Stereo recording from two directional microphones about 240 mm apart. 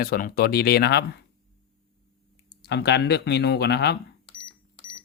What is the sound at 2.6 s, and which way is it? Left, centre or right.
Speech, left.